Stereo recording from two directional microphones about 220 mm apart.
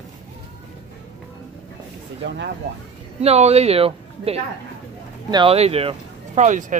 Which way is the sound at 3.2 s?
30° right (ahead or behind).